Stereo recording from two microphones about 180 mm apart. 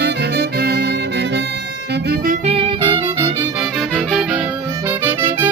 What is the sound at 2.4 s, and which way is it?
Music, 30° right (ahead or behind).